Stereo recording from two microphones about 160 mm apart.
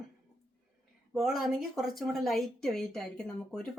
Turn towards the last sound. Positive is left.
turn(degrees=5)  # may be behind; listen again after turning